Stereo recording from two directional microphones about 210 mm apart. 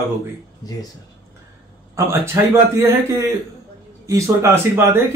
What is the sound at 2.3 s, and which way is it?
Speech, 10° right (ahead or behind).